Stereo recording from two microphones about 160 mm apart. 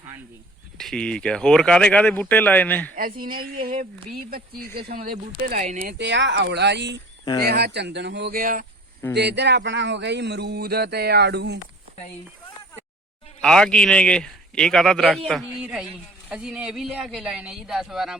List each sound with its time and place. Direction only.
0.8 s speech: 5° left (ahead or behind)
2.9 s speech: 60° right (ahead or behind)
5.9 s a man's voice: 90° right
7.4 s speech: 80° right; by 8.6 s 60° right (ahead or behind)
9.1 s a man's voice: 90° right
13.4 s a man's voice: 5° left (ahead or behind)